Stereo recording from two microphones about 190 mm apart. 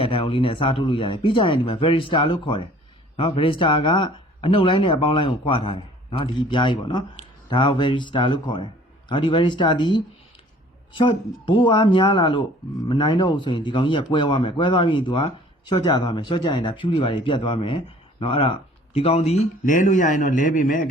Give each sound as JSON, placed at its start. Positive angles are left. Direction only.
{"t": 0.0, "sound": "a man's voice", "side_deg": 30}